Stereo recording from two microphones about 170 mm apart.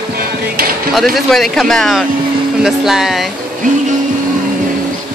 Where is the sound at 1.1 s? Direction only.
Centre (ahead or behind).